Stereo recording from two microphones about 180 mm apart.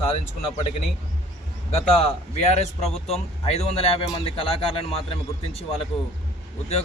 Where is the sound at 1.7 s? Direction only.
35° left (ahead or behind).